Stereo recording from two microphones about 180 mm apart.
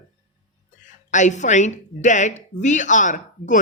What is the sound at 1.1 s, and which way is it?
Speech, 40° left (ahead or behind).